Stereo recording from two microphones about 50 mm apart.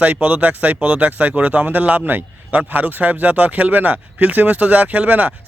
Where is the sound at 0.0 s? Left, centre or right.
Right.